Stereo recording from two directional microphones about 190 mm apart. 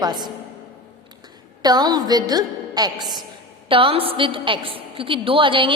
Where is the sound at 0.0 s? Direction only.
20° right (ahead or behind).